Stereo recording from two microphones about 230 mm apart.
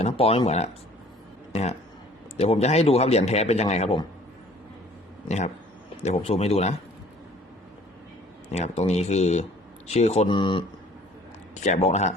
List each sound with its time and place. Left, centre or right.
0.0 s speech: left
2.4 s speech: left
6.0 s speech: left
8.4 s speech: left